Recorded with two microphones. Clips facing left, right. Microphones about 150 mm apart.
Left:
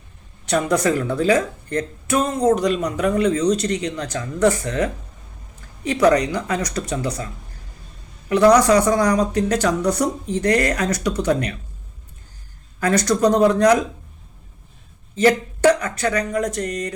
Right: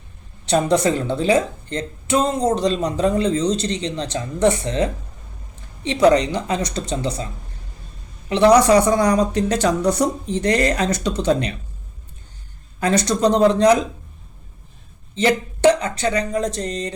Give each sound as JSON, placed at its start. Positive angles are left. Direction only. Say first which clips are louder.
{"t": 0.4, "sound": "speech", "louder": "right 2 dB", "side_deg": -30}
{"t": 8.3, "sound": "speech", "louder": "right 1 dB", "side_deg": -25}
{"t": 12.8, "sound": "speech", "louder": "even", "side_deg": -25}
{"t": 15.1, "sound": "speech", "louder": "left 2 dB", "side_deg": -25}